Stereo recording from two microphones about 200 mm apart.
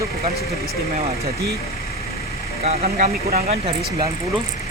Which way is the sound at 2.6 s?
30° right (ahead or behind).